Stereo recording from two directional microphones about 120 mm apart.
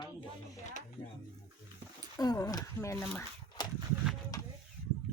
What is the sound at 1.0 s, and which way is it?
Speech, 40° left (ahead or behind).